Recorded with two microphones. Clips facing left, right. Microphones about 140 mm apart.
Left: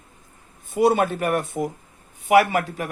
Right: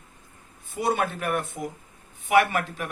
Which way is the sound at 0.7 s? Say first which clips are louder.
Left 7 dB; 50° left (ahead or behind).